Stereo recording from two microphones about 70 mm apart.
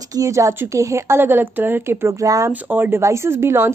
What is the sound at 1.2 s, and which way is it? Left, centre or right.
Speech, right.